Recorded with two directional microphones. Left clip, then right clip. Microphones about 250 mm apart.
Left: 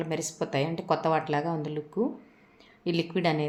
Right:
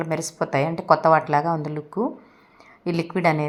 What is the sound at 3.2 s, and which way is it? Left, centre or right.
Speech, centre.